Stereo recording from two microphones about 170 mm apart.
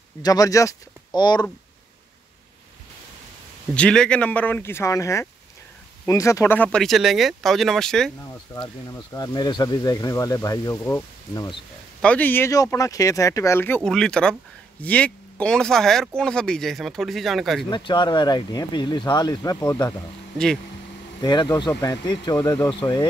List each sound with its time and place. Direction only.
0.2 s speech: 20° left (ahead or behind)
3.7 s speech: 5° left (ahead or behind)
8.5 s speech: 20° left (ahead or behind); by 17.6 s centre (ahead or behind)
17.6 s speech: 25° left (ahead or behind)
21.2 s speech: 25° left (ahead or behind)